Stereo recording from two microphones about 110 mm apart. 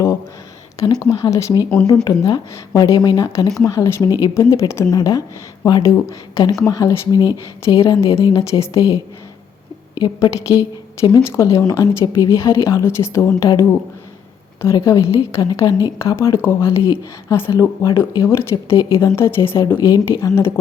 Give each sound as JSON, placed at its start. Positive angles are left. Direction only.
{"t": 1.2, "sound": "a woman's voice", "side_deg": 30}
{"t": 8.4, "sound": "speech", "side_deg": 30}
{"t": 10.0, "sound": "a woman's voice", "side_deg": 35}
{"t": 16.0, "sound": "speech", "side_deg": 25}